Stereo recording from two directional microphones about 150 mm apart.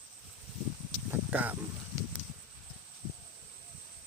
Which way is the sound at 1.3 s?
10° right (ahead or behind).